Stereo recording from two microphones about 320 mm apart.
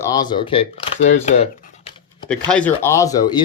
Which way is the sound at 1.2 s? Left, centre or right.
Left.